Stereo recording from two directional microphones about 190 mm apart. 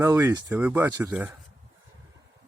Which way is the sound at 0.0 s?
15° right (ahead or behind).